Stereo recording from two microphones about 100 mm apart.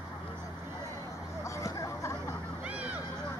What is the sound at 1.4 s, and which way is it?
Hubbub, 35° left (ahead or behind).